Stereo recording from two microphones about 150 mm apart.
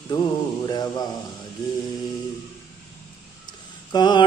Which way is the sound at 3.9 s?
30° left (ahead or behind).